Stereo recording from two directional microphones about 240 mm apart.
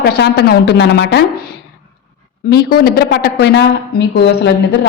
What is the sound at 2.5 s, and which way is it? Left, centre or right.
A woman's voice, left.